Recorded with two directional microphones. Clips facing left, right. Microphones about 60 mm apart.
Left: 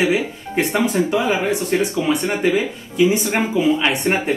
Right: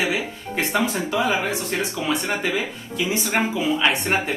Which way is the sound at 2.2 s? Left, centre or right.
Left.